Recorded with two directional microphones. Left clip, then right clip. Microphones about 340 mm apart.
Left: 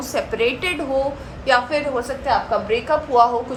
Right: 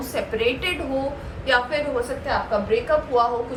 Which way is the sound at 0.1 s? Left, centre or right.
Centre.